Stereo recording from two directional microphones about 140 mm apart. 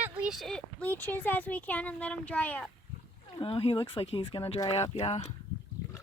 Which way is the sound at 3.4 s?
40° left (ahead or behind).